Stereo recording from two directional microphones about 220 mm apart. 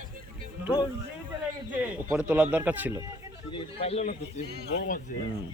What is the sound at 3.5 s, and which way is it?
A man's voice, 25° left (ahead or behind).